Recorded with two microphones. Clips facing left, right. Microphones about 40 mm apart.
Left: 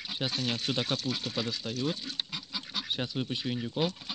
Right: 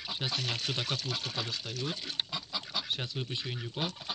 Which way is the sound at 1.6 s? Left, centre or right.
Left.